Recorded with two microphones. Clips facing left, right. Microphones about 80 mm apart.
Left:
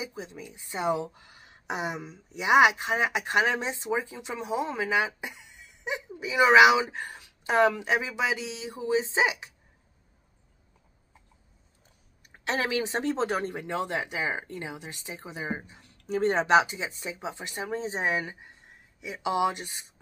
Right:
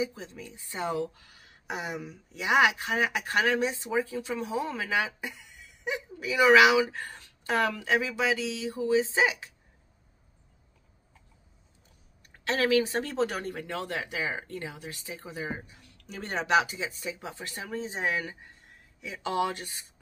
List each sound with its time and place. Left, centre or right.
0.0 s speech: centre
12.3 s speech: left